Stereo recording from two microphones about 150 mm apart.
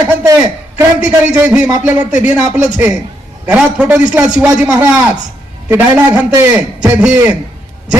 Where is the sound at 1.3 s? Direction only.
5° right (ahead or behind).